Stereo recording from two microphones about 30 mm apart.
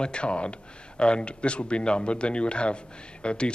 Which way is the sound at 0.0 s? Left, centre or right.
Left.